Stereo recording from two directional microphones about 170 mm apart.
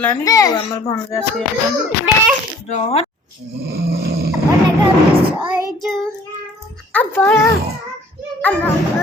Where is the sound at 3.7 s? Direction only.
65° right (ahead or behind).